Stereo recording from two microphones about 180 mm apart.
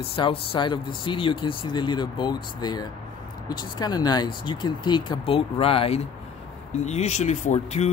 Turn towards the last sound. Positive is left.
turn(degrees=40)  # may be behind; listen again after turning